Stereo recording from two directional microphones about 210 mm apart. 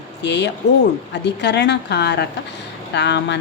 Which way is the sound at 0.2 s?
55° left (ahead or behind).